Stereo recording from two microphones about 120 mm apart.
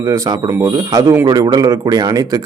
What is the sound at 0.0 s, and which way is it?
A man's voice, 30° right (ahead or behind).